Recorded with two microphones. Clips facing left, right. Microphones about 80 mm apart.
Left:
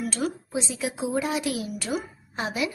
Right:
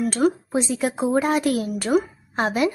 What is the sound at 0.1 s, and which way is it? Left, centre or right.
A woman's voice, right.